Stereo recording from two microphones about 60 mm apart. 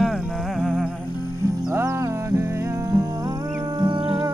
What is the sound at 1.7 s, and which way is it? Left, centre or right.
Music, right.